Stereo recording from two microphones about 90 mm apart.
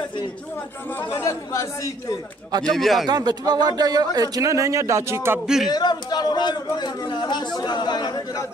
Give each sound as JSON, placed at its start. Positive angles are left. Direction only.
{"t": 0.9, "sound": "speech", "side_deg": 30}
{"t": 2.6, "sound": "speech", "side_deg": 0}
{"t": 3.1, "sound": "speech", "side_deg": -50}
{"t": 5.7, "sound": "a man's voice", "side_deg": 50}